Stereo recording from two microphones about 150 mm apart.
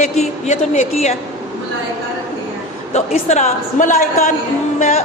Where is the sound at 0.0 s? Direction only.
50° left (ahead or behind).